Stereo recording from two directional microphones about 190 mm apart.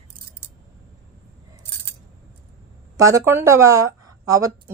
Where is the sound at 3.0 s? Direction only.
15° right (ahead or behind).